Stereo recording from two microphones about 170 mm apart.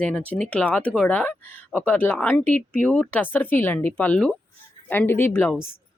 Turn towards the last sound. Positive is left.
turn(degrees=15)  # may be behind; listen again after turning